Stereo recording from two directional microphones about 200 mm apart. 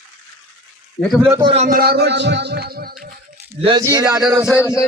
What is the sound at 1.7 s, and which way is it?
Speech, 50° right (ahead or behind).